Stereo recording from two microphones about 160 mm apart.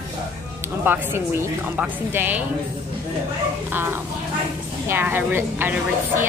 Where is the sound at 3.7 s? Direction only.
15° right (ahead or behind).